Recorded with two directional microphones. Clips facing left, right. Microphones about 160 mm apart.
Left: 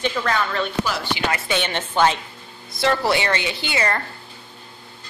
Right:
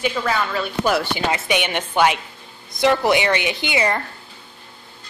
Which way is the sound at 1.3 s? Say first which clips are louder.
Right 2 dB; 20° right (ahead or behind).